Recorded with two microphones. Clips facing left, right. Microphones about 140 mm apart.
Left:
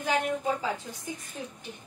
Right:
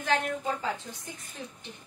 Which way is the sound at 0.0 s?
10° left (ahead or behind).